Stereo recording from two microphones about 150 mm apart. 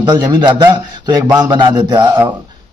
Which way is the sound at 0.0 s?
30° right (ahead or behind).